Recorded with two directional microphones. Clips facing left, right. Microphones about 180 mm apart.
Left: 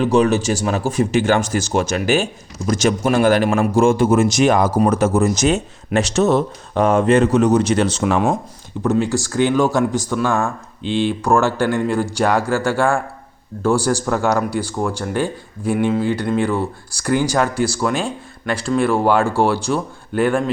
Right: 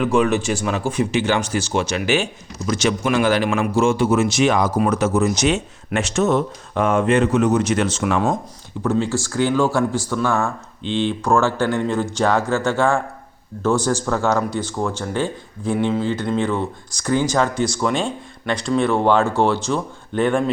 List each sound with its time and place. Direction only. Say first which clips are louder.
0.0 s speech: left 3 dB; 35° left (ahead or behind)
8.8 s speech: left 2 dB; 15° left (ahead or behind)